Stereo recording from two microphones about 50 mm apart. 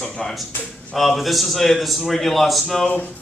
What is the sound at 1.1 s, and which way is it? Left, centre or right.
A man's voice, centre.